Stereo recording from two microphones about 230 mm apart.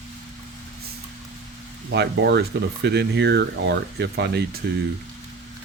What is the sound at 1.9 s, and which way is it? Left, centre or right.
Speech, right.